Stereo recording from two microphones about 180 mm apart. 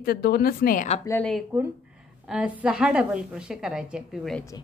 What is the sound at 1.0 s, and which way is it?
Speech, 10° left (ahead or behind).